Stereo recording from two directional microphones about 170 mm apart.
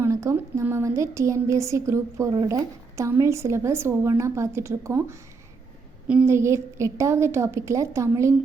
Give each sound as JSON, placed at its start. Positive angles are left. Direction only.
{"t": 0.0, "sound": "a woman's voice", "side_deg": -15}